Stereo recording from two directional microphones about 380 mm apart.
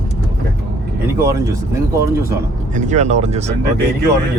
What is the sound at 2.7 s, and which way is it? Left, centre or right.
Speech, centre.